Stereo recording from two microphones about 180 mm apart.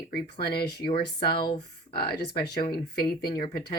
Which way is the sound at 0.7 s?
25° left (ahead or behind).